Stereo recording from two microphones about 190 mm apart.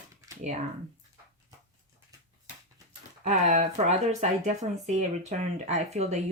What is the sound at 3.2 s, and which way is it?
Speech, 40° right (ahead or behind).